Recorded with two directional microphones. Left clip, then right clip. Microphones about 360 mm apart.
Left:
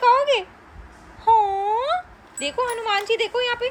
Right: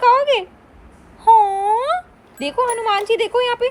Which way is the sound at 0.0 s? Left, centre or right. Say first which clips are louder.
Right 3 dB; centre.